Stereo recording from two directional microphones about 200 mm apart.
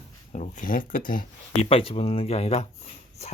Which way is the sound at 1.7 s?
30° left (ahead or behind).